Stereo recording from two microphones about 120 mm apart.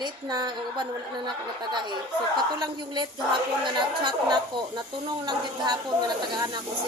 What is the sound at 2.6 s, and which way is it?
A woman's voice, 35° right (ahead or behind).